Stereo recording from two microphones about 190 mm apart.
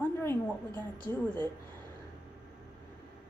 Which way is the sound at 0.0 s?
10° left (ahead or behind).